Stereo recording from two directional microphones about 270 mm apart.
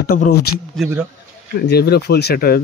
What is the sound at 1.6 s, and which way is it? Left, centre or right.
Speech, left.